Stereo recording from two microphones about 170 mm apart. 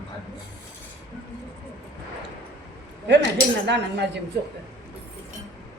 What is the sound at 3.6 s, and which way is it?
Speech, 90° right.